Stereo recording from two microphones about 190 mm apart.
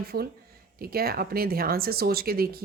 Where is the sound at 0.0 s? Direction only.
55° right (ahead or behind).